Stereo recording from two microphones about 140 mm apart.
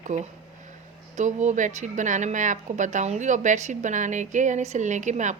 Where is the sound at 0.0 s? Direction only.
60° right (ahead or behind).